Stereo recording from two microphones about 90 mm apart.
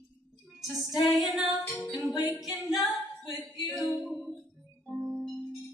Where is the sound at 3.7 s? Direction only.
Centre (ahead or behind).